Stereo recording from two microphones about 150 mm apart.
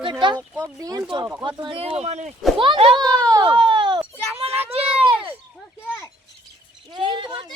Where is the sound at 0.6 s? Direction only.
25° right (ahead or behind); by 2.3 s 50° right (ahead or behind).